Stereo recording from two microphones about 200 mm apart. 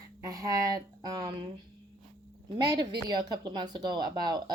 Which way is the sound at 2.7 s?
20° right (ahead or behind).